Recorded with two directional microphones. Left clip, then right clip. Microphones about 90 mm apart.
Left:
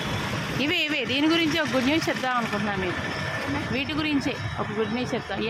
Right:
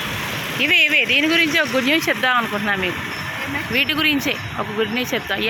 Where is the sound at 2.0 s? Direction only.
35° right (ahead or behind).